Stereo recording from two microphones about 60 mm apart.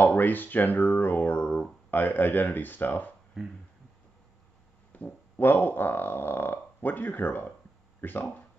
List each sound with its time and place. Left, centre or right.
0.0 s speech: left
4.9 s speech: left